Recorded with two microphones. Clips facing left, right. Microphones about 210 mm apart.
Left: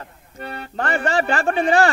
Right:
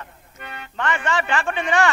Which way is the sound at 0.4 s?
35° left (ahead or behind).